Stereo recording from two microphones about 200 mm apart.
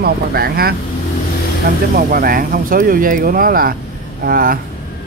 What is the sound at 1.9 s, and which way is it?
Speech, 45° right (ahead or behind).